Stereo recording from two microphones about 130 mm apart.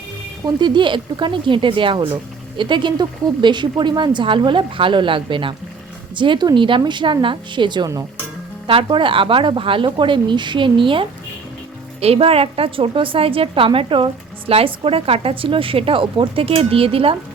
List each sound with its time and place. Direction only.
0.4 s a woman's voice: 35° right (ahead or behind)